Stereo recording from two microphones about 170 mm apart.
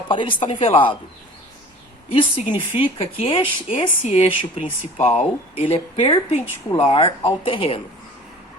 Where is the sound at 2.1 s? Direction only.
30° left (ahead or behind).